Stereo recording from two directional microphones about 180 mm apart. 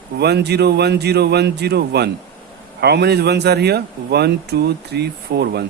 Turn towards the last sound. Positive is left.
turn(degrees=-65)  # may be behind; listen again after turning